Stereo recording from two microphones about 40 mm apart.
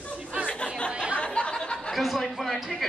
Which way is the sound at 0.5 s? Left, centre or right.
Left.